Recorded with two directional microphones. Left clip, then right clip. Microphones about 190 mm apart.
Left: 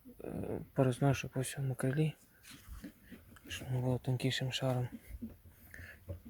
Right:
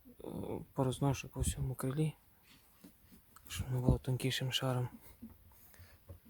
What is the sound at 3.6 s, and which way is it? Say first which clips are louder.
Speech: right 1 dB; 30° right (ahead or behind).